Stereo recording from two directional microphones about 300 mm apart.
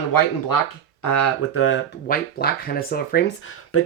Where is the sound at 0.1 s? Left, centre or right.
Left.